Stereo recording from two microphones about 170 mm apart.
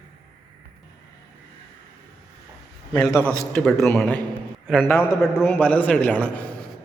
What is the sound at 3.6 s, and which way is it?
A man's voice, 10° left (ahead or behind).